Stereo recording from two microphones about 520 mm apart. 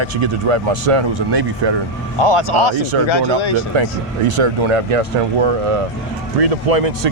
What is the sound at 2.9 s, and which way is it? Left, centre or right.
Speech, right.